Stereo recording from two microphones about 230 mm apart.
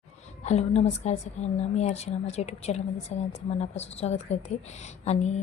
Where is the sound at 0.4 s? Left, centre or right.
Left.